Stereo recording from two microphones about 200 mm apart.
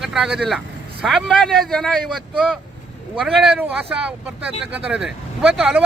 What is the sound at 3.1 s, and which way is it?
Speech, centre (ahead or behind).